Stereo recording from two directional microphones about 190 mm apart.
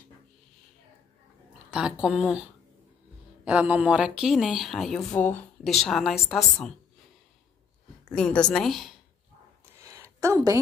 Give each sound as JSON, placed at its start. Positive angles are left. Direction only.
{"t": 1.7, "sound": "a woman's voice", "side_deg": -5}
{"t": 3.4, "sound": "a woman's voice", "side_deg": -5}
{"t": 8.1, "sound": "a woman's voice", "side_deg": 5}
{"t": 9.8, "sound": "a sound", "side_deg": -15}